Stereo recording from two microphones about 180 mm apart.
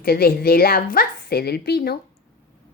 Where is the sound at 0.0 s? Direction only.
55° left (ahead or behind).